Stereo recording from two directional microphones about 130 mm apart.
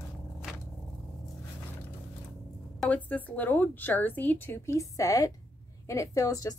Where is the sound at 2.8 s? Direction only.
10° left (ahead or behind).